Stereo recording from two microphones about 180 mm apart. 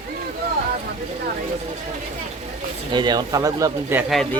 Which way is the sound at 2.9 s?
25° right (ahead or behind).